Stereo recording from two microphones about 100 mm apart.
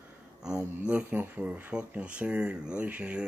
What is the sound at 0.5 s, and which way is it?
Speech, 10° right (ahead or behind).